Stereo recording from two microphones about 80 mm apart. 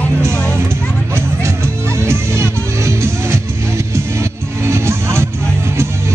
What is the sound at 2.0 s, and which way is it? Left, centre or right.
Music, right.